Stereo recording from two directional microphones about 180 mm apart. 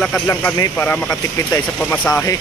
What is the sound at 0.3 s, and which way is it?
Speech, 10° left (ahead or behind).